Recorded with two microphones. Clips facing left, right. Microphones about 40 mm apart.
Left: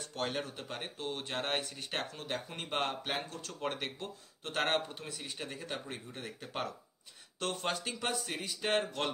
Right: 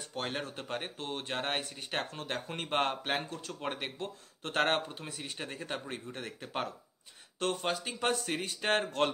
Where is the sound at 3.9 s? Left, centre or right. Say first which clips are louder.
Right 3 dB; right.